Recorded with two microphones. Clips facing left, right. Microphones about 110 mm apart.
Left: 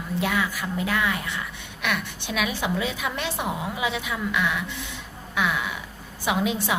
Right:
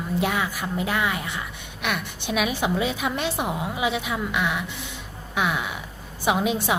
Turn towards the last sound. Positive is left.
turn(degrees=-25)  # may be behind; listen again after turning